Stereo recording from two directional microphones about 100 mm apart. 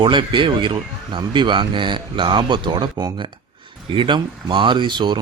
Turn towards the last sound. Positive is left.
turn(degrees=-50)  # may be behind; listen again after turning